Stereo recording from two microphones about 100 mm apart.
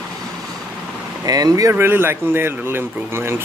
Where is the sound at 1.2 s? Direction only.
40° right (ahead or behind).